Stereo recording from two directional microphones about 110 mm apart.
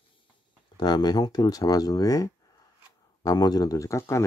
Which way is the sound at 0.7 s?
40° left (ahead or behind).